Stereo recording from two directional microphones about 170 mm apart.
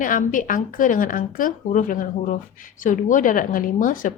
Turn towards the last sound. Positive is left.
turn(degrees=50)  # may be behind; listen again after turning